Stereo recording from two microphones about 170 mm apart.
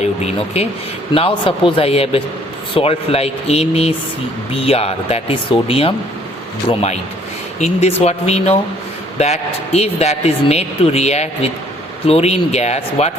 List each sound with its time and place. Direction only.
0.0 s a man's voice: 35° left (ahead or behind)